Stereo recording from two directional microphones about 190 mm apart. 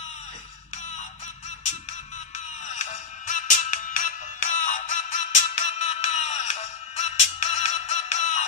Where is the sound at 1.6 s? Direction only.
35° left (ahead or behind).